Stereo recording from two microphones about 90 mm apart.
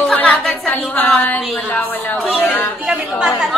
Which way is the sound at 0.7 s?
20° left (ahead or behind).